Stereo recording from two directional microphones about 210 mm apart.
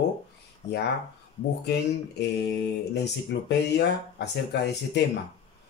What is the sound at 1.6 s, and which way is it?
Speech, 55° left (ahead or behind).